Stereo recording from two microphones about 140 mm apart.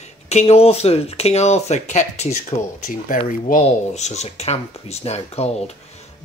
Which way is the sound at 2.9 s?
75° left (ahead or behind).